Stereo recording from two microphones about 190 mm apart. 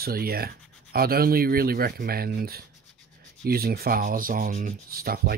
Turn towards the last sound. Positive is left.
turn(degrees=-50)  # may be behind; listen again after turning